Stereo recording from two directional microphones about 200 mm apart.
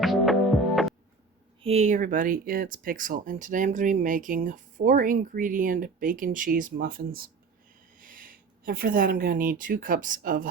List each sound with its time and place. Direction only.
0.0 s music: centre (ahead or behind)
1.6 s speech: 35° right (ahead or behind)